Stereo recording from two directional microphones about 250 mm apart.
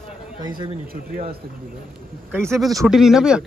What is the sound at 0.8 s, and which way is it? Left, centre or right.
Speech, right.